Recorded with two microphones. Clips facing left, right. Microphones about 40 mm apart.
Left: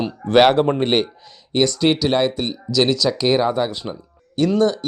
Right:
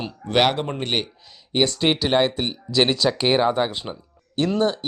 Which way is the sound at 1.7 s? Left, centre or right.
Right.